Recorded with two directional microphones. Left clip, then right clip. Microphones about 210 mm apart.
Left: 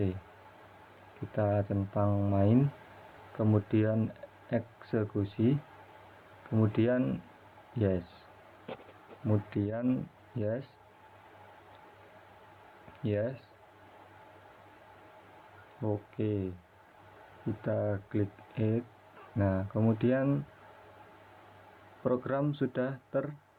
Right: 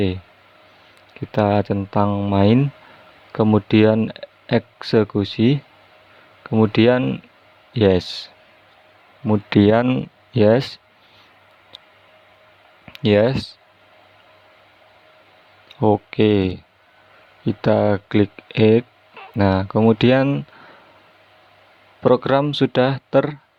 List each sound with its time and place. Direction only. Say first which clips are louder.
1.3 s speech: right 13 dB; 65° right (ahead or behind)
6.6 s speech: right 14 dB; 65° right (ahead or behind)
9.3 s speech: right 19 dB; 70° right (ahead or behind)
13.0 s speech: right 18 dB; 70° right (ahead or behind)
15.8 s speech: right 19 dB; 70° right (ahead or behind)
17.6 s speech: right 16 dB; 70° right (ahead or behind)
22.0 s speech: right 15 dB; 65° right (ahead or behind)